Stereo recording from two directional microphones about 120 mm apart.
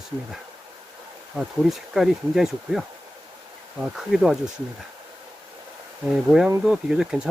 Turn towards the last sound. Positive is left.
turn(degrees=-5)  # may be behind; listen again after turning